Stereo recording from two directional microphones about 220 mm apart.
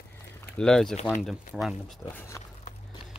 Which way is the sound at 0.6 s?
Centre (ahead or behind).